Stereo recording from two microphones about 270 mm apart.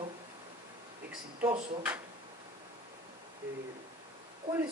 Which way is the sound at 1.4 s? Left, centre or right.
Centre.